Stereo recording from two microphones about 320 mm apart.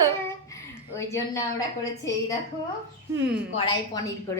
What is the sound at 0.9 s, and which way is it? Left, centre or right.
A woman's voice, centre.